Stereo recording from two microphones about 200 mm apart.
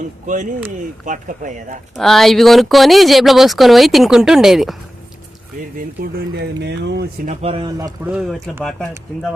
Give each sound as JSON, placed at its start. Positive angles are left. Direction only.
{"t": 1.0, "sound": "speech", "side_deg": -40}
{"t": 2.0, "sound": "speech", "side_deg": 0}
{"t": 6.0, "sound": "speech", "side_deg": -55}
{"t": 7.3, "sound": "speech", "side_deg": -30}
{"t": 7.8, "sound": "speech", "side_deg": -15}
{"t": 8.5, "sound": "speech", "side_deg": 5}